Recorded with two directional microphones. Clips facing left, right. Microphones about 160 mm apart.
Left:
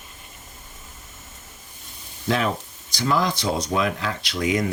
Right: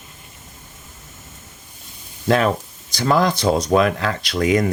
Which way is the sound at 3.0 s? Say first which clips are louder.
Right 5 dB; 55° right (ahead or behind).